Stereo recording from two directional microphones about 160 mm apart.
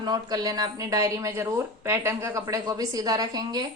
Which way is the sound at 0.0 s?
25° right (ahead or behind).